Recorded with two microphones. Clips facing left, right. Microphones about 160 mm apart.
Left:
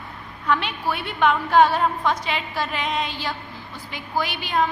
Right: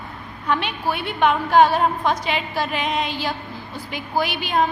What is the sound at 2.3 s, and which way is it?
Speech, 5° right (ahead or behind).